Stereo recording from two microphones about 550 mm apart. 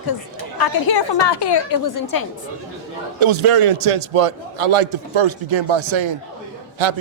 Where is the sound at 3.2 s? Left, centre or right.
Right.